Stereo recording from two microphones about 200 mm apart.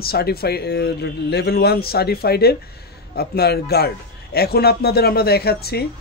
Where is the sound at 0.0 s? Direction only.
50° left (ahead or behind).